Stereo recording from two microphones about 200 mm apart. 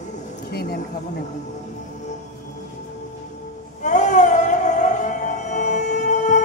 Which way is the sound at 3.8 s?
35° left (ahead or behind).